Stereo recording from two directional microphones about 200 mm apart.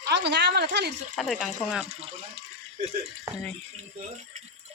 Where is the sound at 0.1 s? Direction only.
60° right (ahead or behind).